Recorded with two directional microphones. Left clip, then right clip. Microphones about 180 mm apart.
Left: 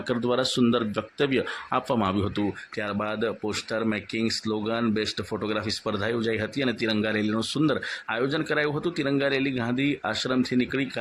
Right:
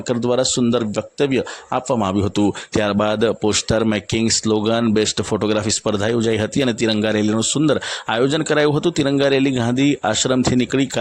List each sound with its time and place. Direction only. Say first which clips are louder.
0.1 s speech: right 7 dB; 35° right (ahead or behind)